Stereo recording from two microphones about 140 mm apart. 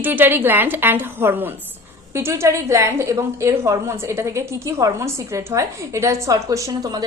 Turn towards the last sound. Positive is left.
turn(degrees=-25)  # may be behind; listen again after turning